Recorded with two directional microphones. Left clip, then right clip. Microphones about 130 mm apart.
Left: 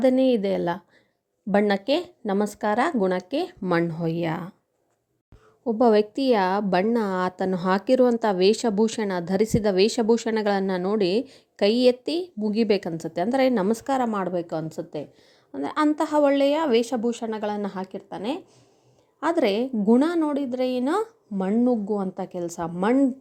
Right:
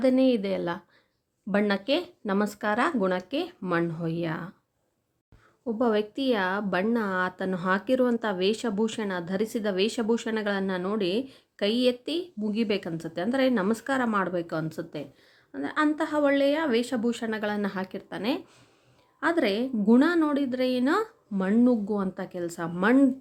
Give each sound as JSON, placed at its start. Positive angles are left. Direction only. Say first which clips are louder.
{"t": 0.2, "sound": "a woman's voice", "louder": "left 3 dB", "side_deg": 30}
{"t": 5.6, "sound": "a woman's voice", "louder": "left 7 dB", "side_deg": 35}
{"t": 15.5, "sound": "a woman's voice", "louder": "left 3 dB", "side_deg": 40}
{"t": 17.0, "sound": "a woman's voice", "louder": "left 2 dB", "side_deg": 15}
{"t": 19.2, "sound": "a woman's voice", "louder": "left 3 dB", "side_deg": 30}
{"t": 21.5, "sound": "a woman's voice", "louder": "left 1 dB", "side_deg": 10}
{"t": 21.9, "sound": "a woman's voice", "louder": "left 3 dB", "side_deg": 20}